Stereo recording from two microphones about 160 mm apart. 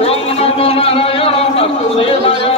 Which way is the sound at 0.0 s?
40° left (ahead or behind).